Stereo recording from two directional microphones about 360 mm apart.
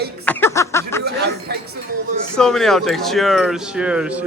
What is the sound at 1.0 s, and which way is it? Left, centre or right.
Speech, right.